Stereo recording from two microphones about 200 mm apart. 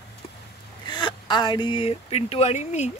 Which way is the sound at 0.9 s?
20° left (ahead or behind).